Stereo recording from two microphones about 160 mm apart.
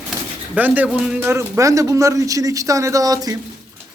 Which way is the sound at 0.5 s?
10° right (ahead or behind).